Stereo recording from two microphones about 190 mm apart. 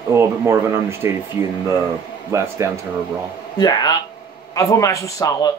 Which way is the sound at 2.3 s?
15° right (ahead or behind).